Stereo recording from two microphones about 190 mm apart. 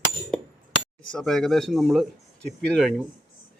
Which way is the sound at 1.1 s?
Centre (ahead or behind).